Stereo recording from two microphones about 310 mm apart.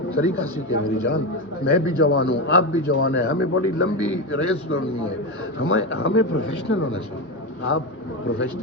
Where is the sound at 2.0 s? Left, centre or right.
Left.